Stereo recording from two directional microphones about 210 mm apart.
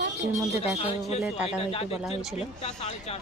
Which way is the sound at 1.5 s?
30° left (ahead or behind).